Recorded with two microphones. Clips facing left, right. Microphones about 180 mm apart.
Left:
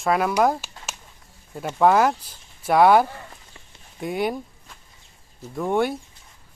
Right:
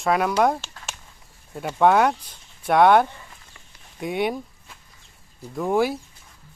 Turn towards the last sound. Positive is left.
turn(degrees=0)  # may be behind; listen again after turning